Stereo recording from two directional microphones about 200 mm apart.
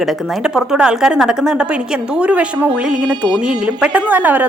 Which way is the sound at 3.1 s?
20° right (ahead or behind).